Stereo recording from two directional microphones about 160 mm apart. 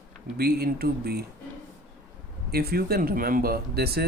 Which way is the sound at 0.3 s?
75° right (ahead or behind).